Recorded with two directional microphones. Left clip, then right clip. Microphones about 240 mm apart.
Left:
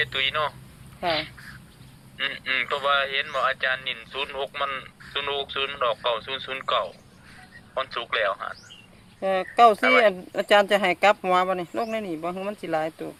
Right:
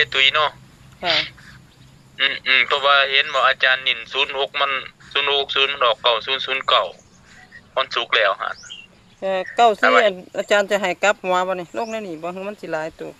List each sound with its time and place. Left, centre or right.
0.0 s speech: right
9.2 s speech: centre